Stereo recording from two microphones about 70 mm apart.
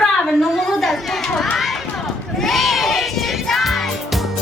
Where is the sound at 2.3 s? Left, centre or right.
Centre.